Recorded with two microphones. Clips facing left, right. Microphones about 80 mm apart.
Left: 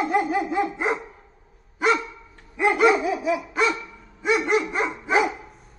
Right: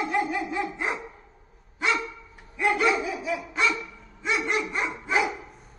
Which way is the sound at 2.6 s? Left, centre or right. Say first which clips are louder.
Left 5 dB; left.